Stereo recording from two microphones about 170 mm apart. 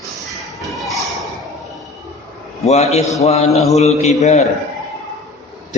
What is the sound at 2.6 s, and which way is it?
Speech, 40° left (ahead or behind).